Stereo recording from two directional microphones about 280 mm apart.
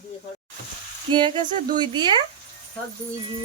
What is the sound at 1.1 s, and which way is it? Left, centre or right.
Speech, centre.